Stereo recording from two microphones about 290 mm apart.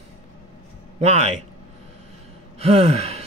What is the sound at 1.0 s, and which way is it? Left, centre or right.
Speech, right.